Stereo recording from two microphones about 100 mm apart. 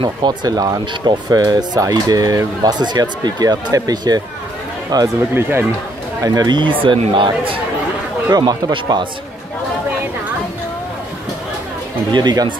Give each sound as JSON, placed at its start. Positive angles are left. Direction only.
{"t": 0.0, "sound": "speech", "side_deg": -50}
{"t": 5.3, "sound": "speech", "side_deg": -25}
{"t": 6.2, "sound": "speech", "side_deg": -45}
{"t": 8.3, "sound": "speech", "side_deg": -45}
{"t": 12.1, "sound": "speech", "side_deg": -45}